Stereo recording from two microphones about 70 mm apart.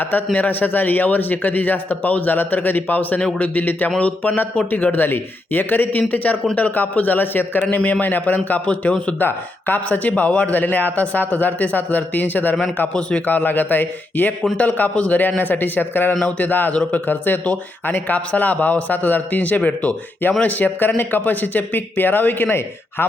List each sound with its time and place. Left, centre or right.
0.0 s a man's voice: left
13.0 s a man's voice: centre
13.2 s a man's voice: left